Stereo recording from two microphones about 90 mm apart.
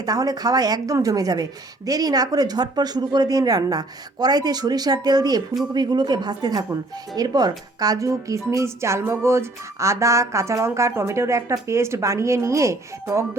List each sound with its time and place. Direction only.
0.0 s a woman's voice: 45° right (ahead or behind)
8.4 s music: 35° right (ahead or behind)